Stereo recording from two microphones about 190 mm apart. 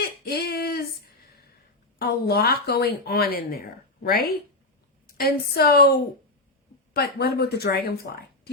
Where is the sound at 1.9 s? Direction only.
55° left (ahead or behind).